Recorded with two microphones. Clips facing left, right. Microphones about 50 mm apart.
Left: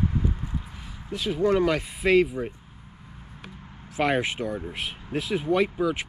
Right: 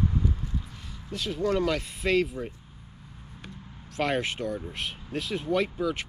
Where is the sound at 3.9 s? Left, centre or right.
Centre.